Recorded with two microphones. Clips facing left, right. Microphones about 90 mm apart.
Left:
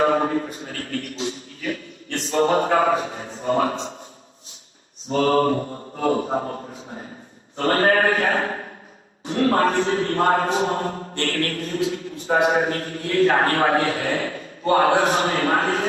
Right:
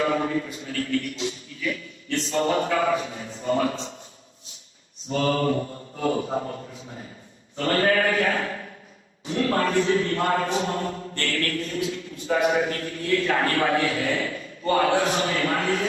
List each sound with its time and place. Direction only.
0.0 s speech: 45° left (ahead or behind)
5.1 s mantra: 40° left (ahead or behind)
7.5 s a man's voice: 40° left (ahead or behind)
11.2 s mantra: 40° left (ahead or behind)
12.2 s a man's voice: 40° left (ahead or behind)